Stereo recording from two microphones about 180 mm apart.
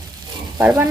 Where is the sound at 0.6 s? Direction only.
10° right (ahead or behind).